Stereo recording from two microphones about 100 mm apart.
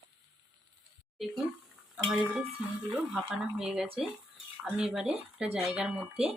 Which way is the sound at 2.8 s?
5° right (ahead or behind).